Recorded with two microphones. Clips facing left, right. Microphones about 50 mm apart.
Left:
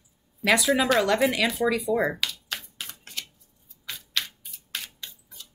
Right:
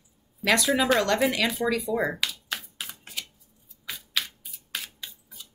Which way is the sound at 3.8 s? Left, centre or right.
Centre.